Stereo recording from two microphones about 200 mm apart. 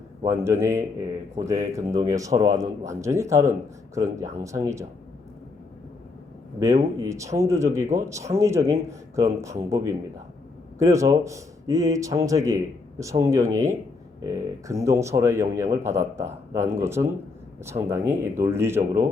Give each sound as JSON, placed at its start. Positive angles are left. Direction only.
{"t": 0.3, "sound": "speech", "side_deg": -15}
{"t": 6.6, "sound": "speech", "side_deg": -15}